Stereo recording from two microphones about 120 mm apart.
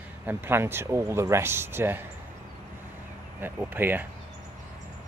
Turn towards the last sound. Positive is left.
turn(degrees=-15)  # may be behind; listen again after turning